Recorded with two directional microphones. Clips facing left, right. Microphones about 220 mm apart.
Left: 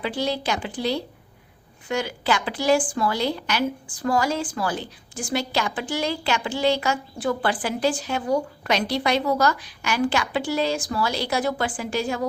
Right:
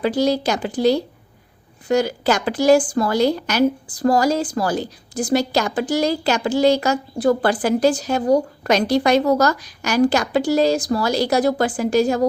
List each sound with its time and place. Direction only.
0.0 s a woman's voice: 40° right (ahead or behind)